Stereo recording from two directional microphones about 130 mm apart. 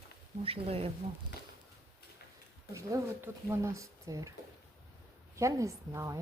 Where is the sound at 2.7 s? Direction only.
20° right (ahead or behind).